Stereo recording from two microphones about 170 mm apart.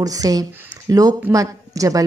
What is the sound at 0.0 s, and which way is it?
A woman's voice, 20° right (ahead or behind).